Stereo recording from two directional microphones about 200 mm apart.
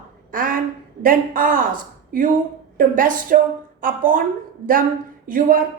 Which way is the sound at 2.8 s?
45° right (ahead or behind).